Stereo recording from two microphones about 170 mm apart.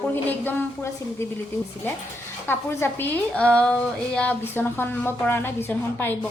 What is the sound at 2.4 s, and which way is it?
A woman's voice, 15° left (ahead or behind).